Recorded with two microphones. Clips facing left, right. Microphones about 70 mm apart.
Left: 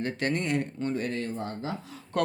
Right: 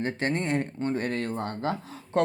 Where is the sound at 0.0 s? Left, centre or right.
Right.